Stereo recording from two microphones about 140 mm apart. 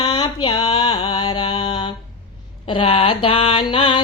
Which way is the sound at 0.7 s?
30° left (ahead or behind).